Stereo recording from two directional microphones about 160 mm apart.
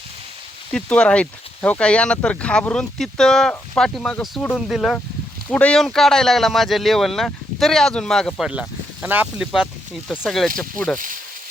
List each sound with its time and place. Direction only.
0.7 s speech: 5° left (ahead or behind)
10.9 s speech: 55° right (ahead or behind)